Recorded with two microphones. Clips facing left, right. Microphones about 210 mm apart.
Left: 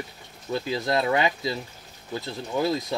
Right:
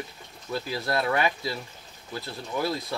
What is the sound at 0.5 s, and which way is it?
Speech, 20° left (ahead or behind).